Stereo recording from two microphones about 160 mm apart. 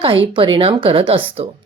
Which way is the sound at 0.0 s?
30° right (ahead or behind).